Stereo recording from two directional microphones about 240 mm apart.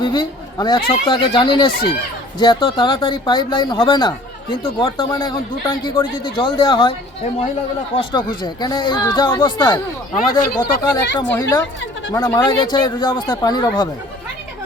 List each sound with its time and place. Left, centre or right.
0.0 s a man's voice: centre
8.1 s a man's voice: centre
11.3 s speech: centre